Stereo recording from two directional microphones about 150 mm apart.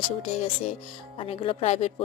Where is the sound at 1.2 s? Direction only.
40° left (ahead or behind).